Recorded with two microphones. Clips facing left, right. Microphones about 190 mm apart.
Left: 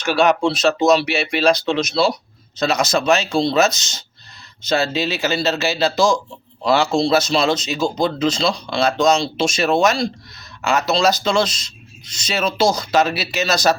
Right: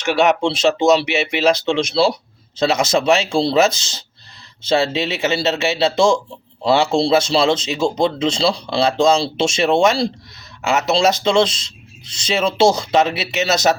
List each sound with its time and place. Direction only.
0.0 s speech: 20° right (ahead or behind)